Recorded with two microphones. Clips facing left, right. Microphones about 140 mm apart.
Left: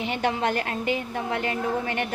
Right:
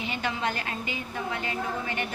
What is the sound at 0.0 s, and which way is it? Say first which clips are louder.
A woman's voice: left 5 dB; 60° left (ahead or behind).